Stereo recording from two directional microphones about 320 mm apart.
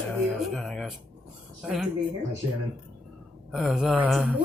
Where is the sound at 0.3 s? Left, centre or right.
Centre.